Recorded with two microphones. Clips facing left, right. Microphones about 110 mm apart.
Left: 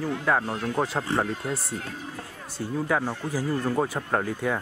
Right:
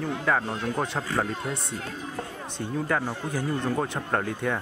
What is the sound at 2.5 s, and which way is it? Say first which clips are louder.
Speech: left 1 dB; 5° left (ahead or behind).